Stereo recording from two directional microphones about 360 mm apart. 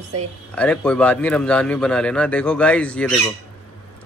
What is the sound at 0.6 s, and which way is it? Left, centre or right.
Speech, centre.